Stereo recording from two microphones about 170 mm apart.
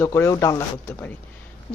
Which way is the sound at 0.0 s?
15° left (ahead or behind).